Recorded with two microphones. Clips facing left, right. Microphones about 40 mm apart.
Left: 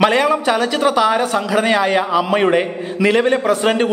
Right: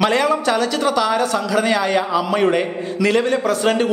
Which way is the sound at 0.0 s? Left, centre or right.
Centre.